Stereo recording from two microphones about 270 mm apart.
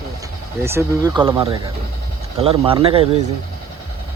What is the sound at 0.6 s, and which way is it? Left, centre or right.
Speech, centre.